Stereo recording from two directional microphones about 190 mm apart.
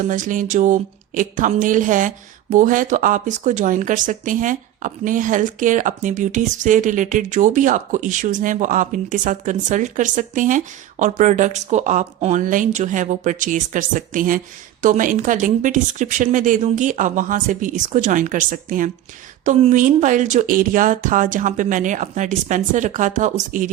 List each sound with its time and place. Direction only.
0.0 s speech: 45° right (ahead or behind)